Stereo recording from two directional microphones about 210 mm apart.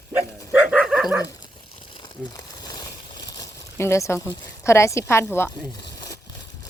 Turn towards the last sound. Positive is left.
turn(degrees=20)  # may be behind; listen again after turning